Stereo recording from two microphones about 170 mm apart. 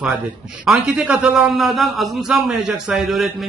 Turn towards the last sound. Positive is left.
turn(degrees=0)  # may be behind; listen again after turning